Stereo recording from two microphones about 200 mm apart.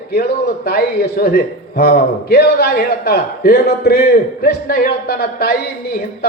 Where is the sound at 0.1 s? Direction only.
50° left (ahead or behind).